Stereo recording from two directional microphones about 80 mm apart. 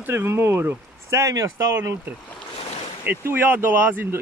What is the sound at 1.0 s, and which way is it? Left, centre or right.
Speech, right.